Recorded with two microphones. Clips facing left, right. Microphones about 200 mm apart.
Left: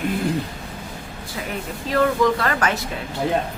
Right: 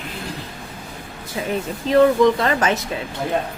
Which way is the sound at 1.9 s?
20° right (ahead or behind).